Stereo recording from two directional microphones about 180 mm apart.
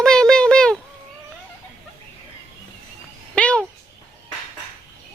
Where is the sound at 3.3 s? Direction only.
5° left (ahead or behind).